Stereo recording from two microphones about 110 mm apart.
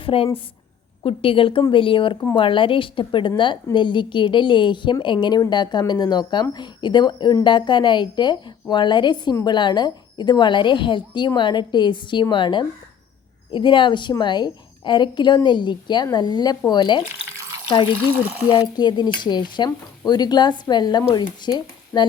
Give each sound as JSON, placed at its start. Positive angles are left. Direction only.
{"t": 0.0, "sound": "a woman's voice", "side_deg": 55}
{"t": 18.5, "sound": "speech", "side_deg": 40}